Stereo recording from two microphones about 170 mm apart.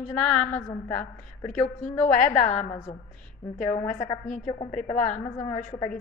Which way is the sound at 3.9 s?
45° left (ahead or behind).